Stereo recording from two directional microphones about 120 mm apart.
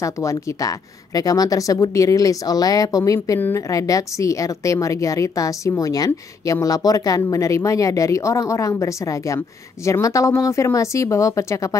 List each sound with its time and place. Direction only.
0.0 s a woman's voice: 25° left (ahead or behind)